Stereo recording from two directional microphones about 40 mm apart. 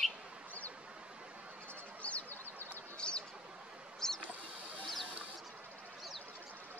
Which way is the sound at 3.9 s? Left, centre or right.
Centre.